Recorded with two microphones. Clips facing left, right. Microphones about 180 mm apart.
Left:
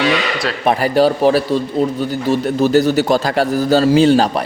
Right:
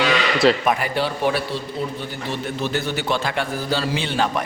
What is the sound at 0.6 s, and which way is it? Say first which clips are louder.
Speech: left 8 dB; 35° left (ahead or behind).